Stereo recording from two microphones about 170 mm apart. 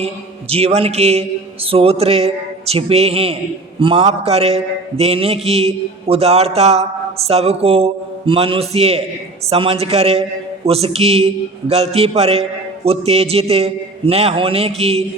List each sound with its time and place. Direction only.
0.5 s a man's voice: 35° right (ahead or behind)